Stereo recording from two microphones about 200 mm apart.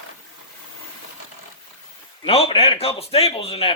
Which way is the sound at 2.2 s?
30° left (ahead or behind).